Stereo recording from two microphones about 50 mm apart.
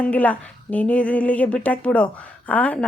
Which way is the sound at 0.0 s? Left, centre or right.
Left.